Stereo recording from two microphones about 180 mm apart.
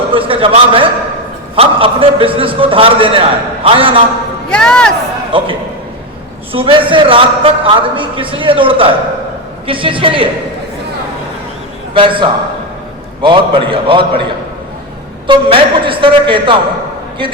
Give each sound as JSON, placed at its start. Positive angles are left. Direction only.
{"t": 0.1, "sound": "a sound", "side_deg": -30}
{"t": 1.5, "sound": "a man's voice", "side_deg": -30}
{"t": 4.5, "sound": "speech", "side_deg": 5}
{"t": 5.3, "sound": "a man's voice", "side_deg": -30}
{"t": 6.5, "sound": "a man's voice", "side_deg": -30}
{"t": 11.9, "sound": "a man's voice", "side_deg": -30}
{"t": 15.3, "sound": "a man's voice", "side_deg": -30}